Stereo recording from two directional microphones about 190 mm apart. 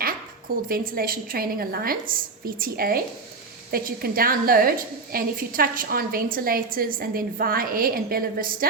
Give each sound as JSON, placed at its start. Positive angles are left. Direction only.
{"t": 0.7, "sound": "a woman's voice", "side_deg": -50}